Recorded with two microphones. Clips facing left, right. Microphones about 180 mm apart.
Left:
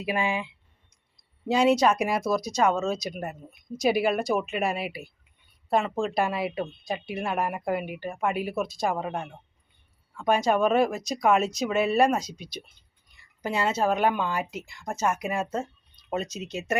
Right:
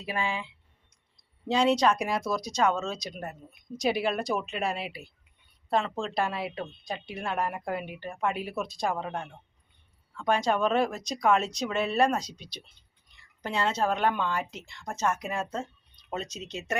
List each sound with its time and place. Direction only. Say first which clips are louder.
0.0 s speech: left 4 dB; 10° left (ahead or behind)